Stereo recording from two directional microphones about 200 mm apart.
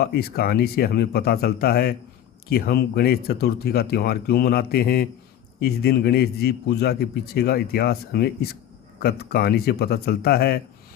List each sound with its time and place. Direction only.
0.0 s a man's voice: 50° left (ahead or behind)